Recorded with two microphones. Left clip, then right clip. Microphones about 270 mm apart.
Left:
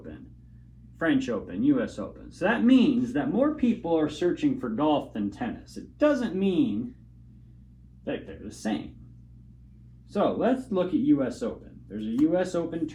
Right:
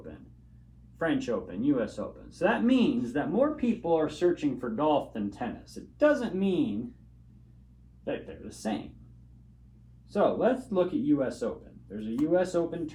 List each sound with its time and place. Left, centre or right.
0.9 s speech: right
10.1 s speech: right